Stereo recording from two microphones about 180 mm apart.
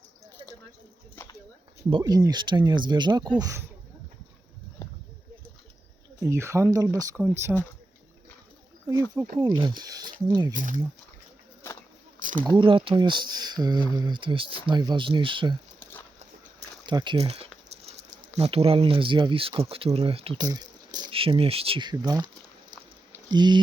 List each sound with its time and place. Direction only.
1.9 s speech: 25° right (ahead or behind)
6.2 s speech: 15° right (ahead or behind)
7.5 s speech: centre (ahead or behind)
9.4 s speech: 25° right (ahead or behind)
10.5 s speech: 45° right (ahead or behind)
12.5 s speech: 25° right (ahead or behind)
16.8 s speech: 25° right (ahead or behind)
23.3 s speech: 25° right (ahead or behind)